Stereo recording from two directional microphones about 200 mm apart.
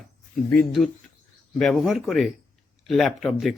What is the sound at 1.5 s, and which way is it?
Speech, centre (ahead or behind).